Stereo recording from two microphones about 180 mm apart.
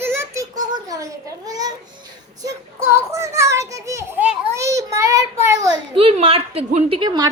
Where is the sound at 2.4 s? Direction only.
15° right (ahead or behind).